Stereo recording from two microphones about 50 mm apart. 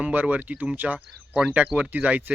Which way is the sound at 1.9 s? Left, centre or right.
Right.